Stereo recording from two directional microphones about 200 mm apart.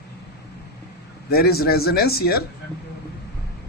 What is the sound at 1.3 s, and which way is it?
Speech, 50° left (ahead or behind).